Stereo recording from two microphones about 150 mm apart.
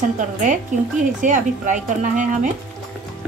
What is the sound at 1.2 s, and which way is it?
A woman's voice, 60° right (ahead or behind).